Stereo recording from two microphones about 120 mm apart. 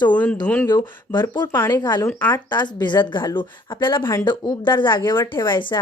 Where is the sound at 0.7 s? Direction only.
35° left (ahead or behind).